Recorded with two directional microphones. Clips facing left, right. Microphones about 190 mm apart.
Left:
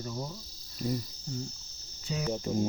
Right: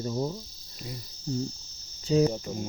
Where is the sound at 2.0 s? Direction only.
30° right (ahead or behind).